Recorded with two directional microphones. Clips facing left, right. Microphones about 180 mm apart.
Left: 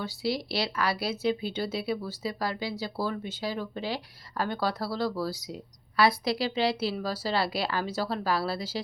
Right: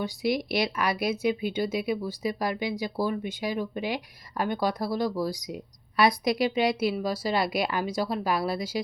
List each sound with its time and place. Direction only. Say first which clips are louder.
0.0 s speech: right 3 dB; 15° right (ahead or behind)